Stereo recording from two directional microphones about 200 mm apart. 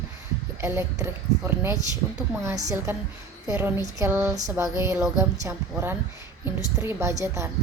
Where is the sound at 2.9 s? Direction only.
10° right (ahead or behind).